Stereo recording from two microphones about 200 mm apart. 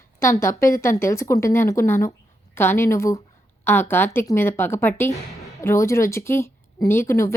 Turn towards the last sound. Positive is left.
turn(degrees=15)  # may be behind; listen again after turning